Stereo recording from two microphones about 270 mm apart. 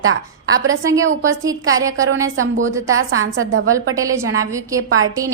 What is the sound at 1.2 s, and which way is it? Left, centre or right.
Speech, centre.